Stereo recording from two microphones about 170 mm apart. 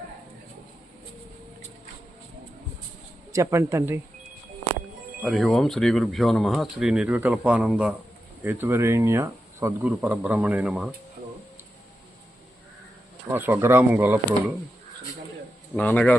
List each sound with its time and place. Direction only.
3.3 s speech: 15° right (ahead or behind)
5.2 s speech: centre (ahead or behind)
13.3 s speech: 10° right (ahead or behind)
15.7 s speech: 10° left (ahead or behind)